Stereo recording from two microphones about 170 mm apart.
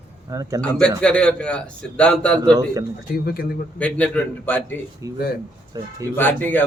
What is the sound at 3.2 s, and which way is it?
Speech, 60° left (ahead or behind).